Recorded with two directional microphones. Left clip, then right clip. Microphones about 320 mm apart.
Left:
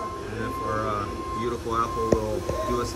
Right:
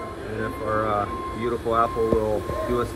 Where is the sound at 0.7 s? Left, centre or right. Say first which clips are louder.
Right 4 dB; centre.